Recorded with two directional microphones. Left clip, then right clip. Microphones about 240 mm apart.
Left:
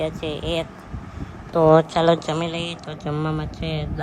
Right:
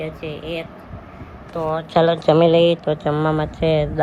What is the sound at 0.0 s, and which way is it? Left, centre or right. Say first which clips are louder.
Speech: left 2 dB; centre.